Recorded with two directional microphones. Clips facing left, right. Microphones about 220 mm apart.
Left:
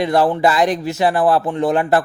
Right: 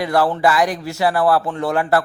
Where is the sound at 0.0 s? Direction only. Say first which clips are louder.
Left 2 dB; 20° left (ahead or behind).